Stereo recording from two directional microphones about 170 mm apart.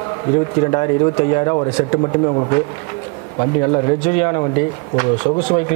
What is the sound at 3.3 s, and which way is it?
Speech, 50° left (ahead or behind).